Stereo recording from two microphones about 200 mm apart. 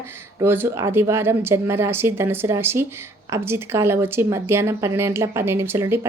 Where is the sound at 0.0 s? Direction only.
10° right (ahead or behind).